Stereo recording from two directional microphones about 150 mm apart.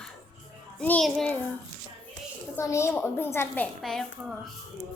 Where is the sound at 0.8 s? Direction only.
5° left (ahead or behind).